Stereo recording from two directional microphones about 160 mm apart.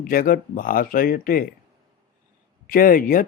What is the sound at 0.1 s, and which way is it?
Speech, 60° left (ahead or behind).